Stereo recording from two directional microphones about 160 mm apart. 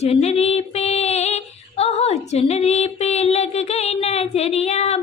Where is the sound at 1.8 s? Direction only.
40° left (ahead or behind).